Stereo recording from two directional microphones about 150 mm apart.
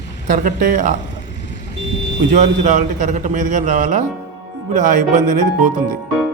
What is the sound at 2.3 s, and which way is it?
A man's voice, 55° right (ahead or behind).